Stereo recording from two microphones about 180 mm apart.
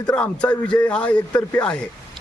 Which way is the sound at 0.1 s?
5° left (ahead or behind).